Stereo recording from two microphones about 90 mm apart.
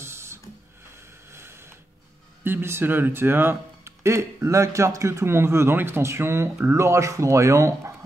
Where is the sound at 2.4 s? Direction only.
25° right (ahead or behind).